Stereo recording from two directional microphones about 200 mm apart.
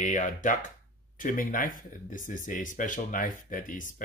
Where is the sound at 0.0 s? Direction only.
40° left (ahead or behind).